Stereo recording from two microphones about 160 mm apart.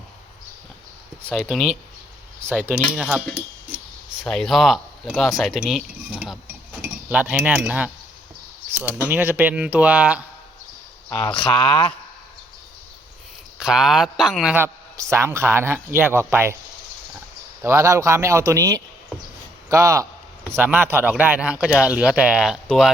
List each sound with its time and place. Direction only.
1.3 s speech: centre (ahead or behind)
2.5 s speech: 15° right (ahead or behind)
6.8 s cutlery: 10° right (ahead or behind)
8.7 s speech: 10° right (ahead or behind)
11.3 s speech: 30° left (ahead or behind)
13.6 s speech: centre (ahead or behind)
14.5 s speech: 15° right (ahead or behind)
17.6 s a man's voice: 15° right (ahead or behind); by 22.9 s centre (ahead or behind)